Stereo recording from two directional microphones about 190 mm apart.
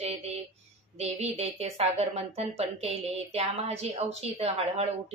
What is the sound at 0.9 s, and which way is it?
Speech, 35° right (ahead or behind).